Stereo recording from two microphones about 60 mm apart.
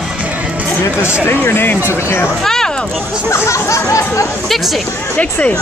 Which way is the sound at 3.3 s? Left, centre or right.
Left.